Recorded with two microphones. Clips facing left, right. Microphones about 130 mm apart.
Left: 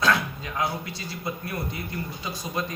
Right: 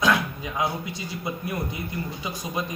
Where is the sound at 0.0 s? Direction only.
15° right (ahead or behind).